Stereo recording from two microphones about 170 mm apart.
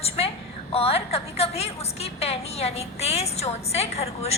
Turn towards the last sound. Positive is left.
turn(degrees=40)  # may be behind; listen again after turning